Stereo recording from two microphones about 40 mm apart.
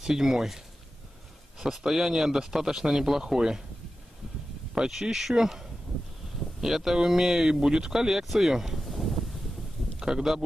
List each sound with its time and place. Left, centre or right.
0.0 s speech: centre
1.9 s speech: centre
4.7 s speech: centre
9.9 s speech: centre